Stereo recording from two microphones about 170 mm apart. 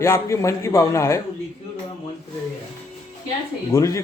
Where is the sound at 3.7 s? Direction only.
20° left (ahead or behind).